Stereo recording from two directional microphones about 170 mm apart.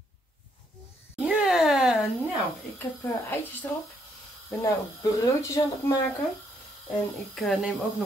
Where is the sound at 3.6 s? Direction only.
10° left (ahead or behind).